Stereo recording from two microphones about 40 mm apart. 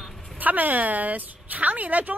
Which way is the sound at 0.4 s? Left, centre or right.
Right.